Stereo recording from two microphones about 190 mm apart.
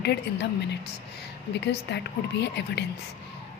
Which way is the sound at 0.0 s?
60° left (ahead or behind).